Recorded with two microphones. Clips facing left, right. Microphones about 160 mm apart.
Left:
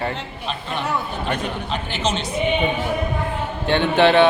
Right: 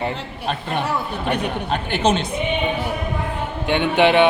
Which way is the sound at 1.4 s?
55° right (ahead or behind).